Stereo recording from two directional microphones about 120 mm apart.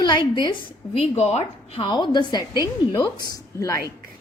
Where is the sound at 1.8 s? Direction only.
40° left (ahead or behind).